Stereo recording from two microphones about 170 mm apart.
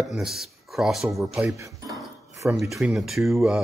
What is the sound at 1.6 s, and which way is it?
Speech, 20° right (ahead or behind).